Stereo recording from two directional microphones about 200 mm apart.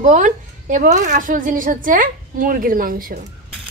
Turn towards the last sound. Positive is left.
turn(degrees=-45)  # may be behind; listen again after turning